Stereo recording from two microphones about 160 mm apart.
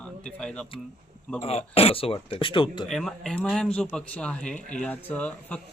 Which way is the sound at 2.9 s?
Centre (ahead or behind).